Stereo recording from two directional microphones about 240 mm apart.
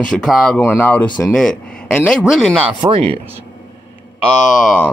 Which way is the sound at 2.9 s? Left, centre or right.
Right.